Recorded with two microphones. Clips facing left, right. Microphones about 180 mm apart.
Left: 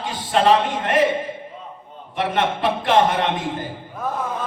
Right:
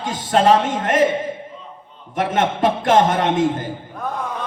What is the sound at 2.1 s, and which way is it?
A man's voice, 45° right (ahead or behind).